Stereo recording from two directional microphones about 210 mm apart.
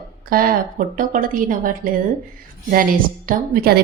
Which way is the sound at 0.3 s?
45° right (ahead or behind).